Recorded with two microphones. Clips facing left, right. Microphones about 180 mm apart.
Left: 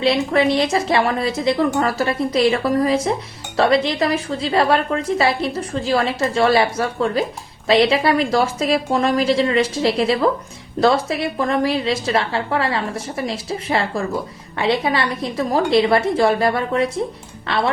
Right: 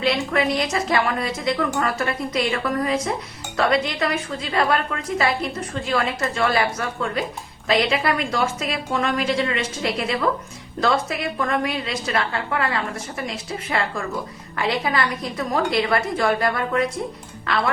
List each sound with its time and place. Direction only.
0.0 s a woman's voice: 30° left (ahead or behind)